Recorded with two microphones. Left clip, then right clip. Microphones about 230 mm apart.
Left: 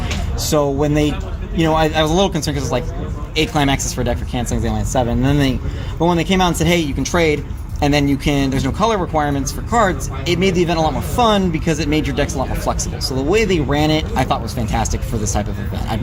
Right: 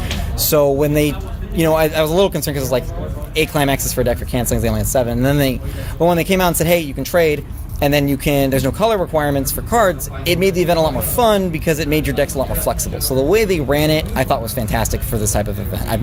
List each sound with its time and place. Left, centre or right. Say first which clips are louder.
0.4 s speech: right 3 dB; right